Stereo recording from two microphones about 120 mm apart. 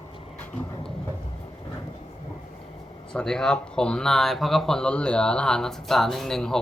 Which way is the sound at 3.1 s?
5° left (ahead or behind).